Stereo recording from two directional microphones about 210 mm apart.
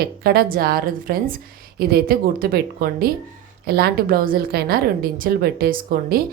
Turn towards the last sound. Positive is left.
turn(degrees=-45)  # may be behind; listen again after turning